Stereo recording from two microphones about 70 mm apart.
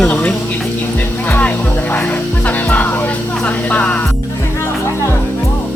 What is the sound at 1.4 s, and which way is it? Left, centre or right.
Music, centre.